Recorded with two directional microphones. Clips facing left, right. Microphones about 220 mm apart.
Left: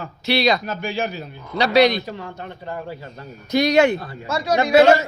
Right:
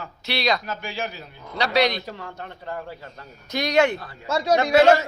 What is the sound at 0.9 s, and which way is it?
Speech, 55° left (ahead or behind).